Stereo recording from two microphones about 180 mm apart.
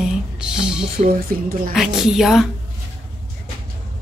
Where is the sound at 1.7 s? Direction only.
Centre (ahead or behind).